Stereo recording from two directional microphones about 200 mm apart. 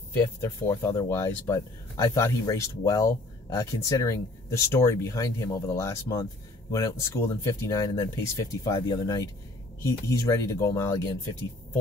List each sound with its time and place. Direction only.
0.4 s speech: 15° left (ahead or behind)